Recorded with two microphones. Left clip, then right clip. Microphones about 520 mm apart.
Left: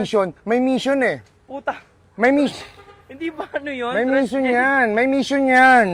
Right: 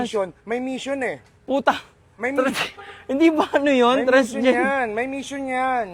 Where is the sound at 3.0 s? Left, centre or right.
Right.